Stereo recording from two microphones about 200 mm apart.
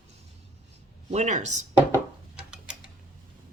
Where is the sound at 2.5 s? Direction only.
5° right (ahead or behind).